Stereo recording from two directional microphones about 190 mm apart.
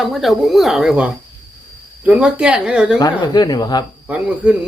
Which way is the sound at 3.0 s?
20° left (ahead or behind).